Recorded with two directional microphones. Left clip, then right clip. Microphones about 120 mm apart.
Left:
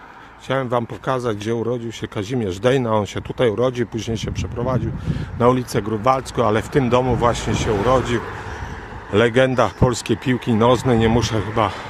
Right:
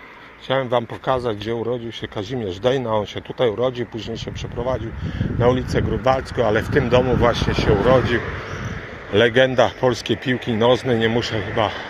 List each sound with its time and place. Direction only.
0.4 s speech: 40° left (ahead or behind); by 3.8 s 80° left
4.6 s speech: 50° left (ahead or behind)
5.4 s speech: 60° left (ahead or behind)
6.1 s speech: 50° left (ahead or behind)
7.2 s speech: 25° left (ahead or behind)
9.1 s speech: 40° left (ahead or behind)